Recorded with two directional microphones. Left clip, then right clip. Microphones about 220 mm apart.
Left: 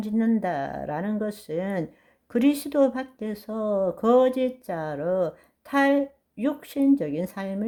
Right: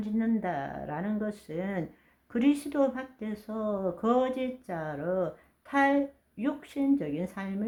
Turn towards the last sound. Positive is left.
turn(degrees=40)  # may be behind; listen again after turning